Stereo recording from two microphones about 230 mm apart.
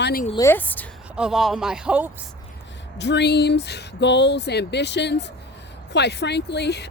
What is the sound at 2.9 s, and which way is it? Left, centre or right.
Speech, left.